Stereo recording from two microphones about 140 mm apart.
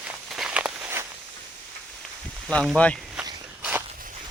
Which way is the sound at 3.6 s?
15° right (ahead or behind).